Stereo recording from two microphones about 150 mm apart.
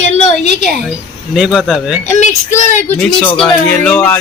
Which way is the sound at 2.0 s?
50° left (ahead or behind).